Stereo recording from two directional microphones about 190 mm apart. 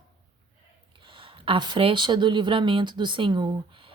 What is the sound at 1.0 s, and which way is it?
A woman's voice, 25° right (ahead or behind).